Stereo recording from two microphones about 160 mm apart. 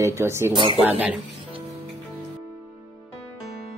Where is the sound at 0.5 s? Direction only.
30° right (ahead or behind).